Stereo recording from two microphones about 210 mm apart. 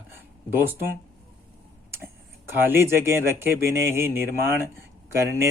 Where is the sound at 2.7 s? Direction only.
10° right (ahead or behind).